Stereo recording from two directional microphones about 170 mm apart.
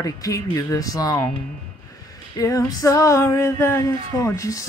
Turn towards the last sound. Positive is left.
turn(degrees=20)  # may be behind; listen again after turning